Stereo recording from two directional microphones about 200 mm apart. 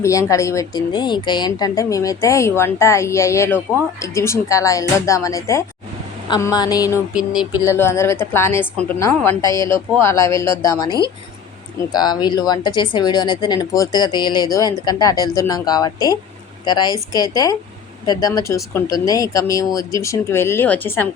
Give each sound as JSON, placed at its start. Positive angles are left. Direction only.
{"t": 0.0, "sound": "a woman's voice", "side_deg": 15}
{"t": 7.1, "sound": "speech", "side_deg": -5}
{"t": 7.6, "sound": "a woman's voice", "side_deg": 15}